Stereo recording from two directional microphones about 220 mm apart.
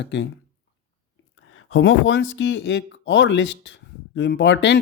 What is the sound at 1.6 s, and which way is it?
Speech, 60° left (ahead or behind).